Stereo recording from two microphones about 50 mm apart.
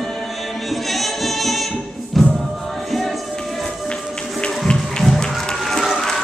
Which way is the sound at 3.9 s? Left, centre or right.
Centre.